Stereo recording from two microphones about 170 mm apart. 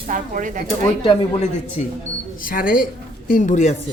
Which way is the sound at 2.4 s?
55° left (ahead or behind).